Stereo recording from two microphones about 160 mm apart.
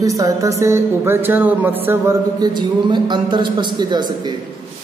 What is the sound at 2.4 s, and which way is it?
A man's voice, 30° right (ahead or behind).